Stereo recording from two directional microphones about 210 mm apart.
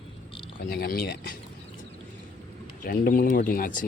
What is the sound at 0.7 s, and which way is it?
Speech, 45° left (ahead or behind).